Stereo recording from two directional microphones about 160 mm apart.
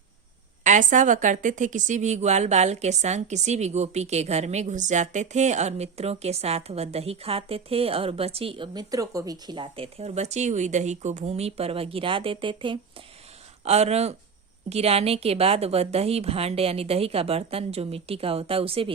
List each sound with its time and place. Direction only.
0.6 s a woman's voice: 50° right (ahead or behind); by 12.8 s 30° right (ahead or behind)
13.7 s a woman's voice: 40° right (ahead or behind)